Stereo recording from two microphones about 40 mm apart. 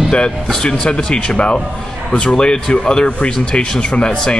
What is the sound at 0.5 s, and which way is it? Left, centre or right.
Speech, centre.